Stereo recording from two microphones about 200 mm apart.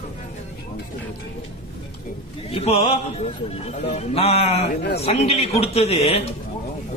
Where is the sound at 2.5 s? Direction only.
30° left (ahead or behind).